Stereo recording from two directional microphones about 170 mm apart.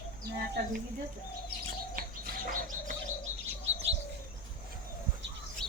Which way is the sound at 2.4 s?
55° right (ahead or behind).